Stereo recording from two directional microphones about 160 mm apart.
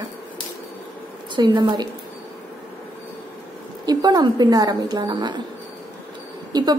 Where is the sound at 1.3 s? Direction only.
25° right (ahead or behind).